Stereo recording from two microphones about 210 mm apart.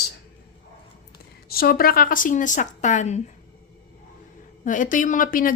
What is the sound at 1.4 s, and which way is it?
A woman's voice, 45° left (ahead or behind).